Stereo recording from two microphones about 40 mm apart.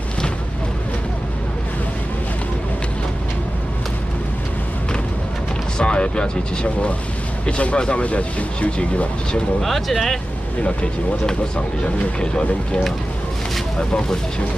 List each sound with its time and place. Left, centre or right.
5.8 s speech: left
9.6 s speech: centre
10.6 s speech: left